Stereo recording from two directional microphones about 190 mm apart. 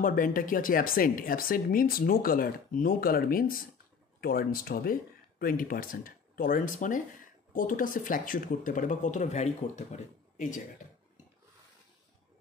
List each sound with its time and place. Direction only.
0.0 s speech: 50° left (ahead or behind)